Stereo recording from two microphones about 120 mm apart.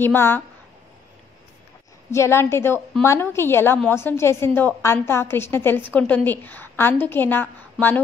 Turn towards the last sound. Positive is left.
turn(degrees=15)  # may be behind; listen again after turning